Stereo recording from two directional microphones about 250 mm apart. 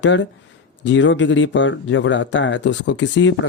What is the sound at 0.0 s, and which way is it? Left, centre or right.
Speech, left.